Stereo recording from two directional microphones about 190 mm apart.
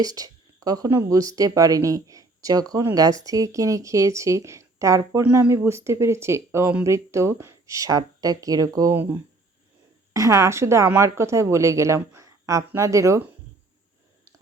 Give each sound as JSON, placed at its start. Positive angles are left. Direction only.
{"t": 0.0, "sound": "speech", "side_deg": -20}
{"t": 10.1, "sound": "speech", "side_deg": -15}